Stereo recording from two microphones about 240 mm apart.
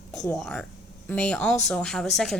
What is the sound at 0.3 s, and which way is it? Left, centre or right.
A woman's voice, centre.